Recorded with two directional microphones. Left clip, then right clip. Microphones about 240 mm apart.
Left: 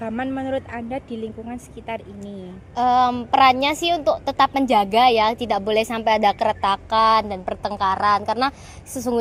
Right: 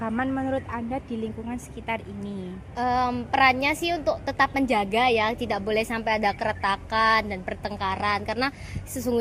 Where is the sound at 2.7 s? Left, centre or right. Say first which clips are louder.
Left 7 dB; left.